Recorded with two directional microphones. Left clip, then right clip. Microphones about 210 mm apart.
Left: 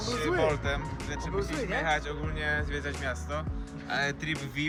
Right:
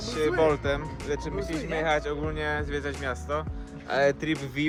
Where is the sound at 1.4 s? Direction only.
Centre (ahead or behind).